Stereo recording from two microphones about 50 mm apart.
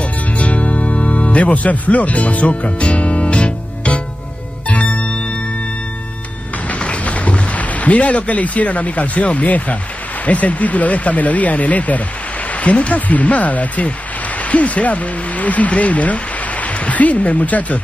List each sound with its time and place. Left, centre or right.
0.0 s music: left
6.7 s speech: left